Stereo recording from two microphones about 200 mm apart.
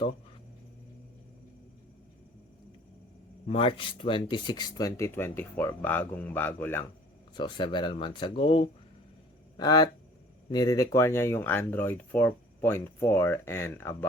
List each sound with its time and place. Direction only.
3.4 s speech: 30° left (ahead or behind); by 6.8 s 10° left (ahead or behind)
7.3 s speech: 25° left (ahead or behind)